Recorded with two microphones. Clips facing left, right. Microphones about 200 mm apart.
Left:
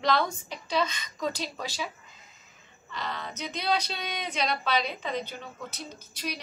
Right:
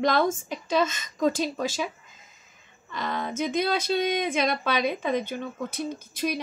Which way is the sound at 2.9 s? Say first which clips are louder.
Right 6 dB; 50° right (ahead or behind).